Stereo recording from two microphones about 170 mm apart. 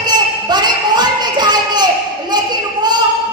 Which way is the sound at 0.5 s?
25° right (ahead or behind).